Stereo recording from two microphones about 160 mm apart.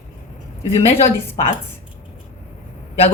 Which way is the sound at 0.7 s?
40° left (ahead or behind).